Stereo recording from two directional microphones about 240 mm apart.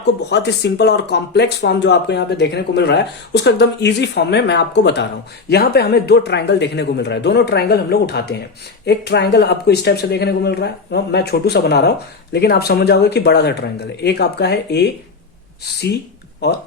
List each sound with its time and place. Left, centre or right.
0.0 s speech: left